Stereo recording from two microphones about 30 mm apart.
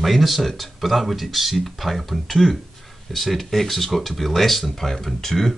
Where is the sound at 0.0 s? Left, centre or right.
Centre.